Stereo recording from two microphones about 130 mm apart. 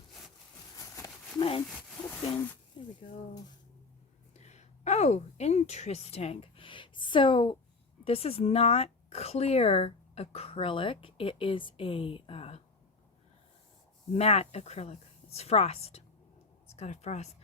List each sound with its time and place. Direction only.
0.8 s a sound: 25° left (ahead or behind)
1.4 s speech: 40° left (ahead or behind)
4.4 s a woman's voice: 60° left (ahead or behind)
14.2 s speech: 55° left (ahead or behind)